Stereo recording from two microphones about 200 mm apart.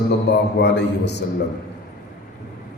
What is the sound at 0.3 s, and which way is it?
Speech, 60° left (ahead or behind).